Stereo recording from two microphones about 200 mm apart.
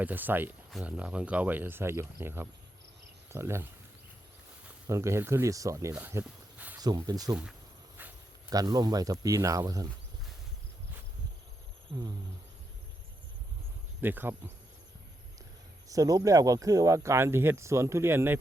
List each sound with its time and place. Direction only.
0.0 s speech: 10° right (ahead or behind)
4.9 s speech: 15° right (ahead or behind)
5.9 s a sound: 10° right (ahead or behind)
6.7 s speech: 20° right (ahead or behind)
7.9 s a sound: 15° right (ahead or behind)
9.2 s speech: 15° right (ahead or behind)
14.0 s speech: 10° right (ahead or behind)
15.9 s speech: 15° right (ahead or behind)